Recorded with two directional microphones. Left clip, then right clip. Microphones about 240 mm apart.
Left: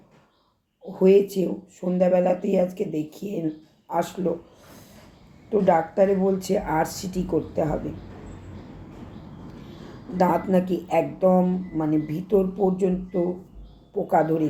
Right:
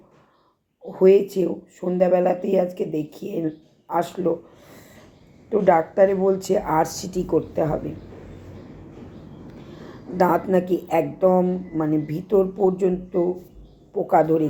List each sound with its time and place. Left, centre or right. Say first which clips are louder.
0.9 s speech: right 2 dB; right
5.5 s speech: right 2 dB; right
10.2 s speech: right 2 dB; right